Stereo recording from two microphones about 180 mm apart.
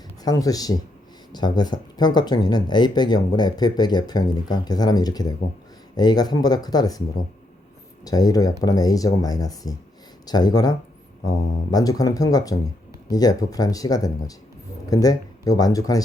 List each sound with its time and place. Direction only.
0.2 s speech: 20° left (ahead or behind)
8.0 s speech: 20° left (ahead or behind)